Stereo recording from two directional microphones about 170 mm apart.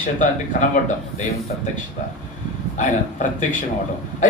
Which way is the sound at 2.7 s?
45° left (ahead or behind).